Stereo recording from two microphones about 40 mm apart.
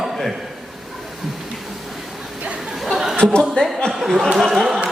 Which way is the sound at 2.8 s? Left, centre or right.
Centre.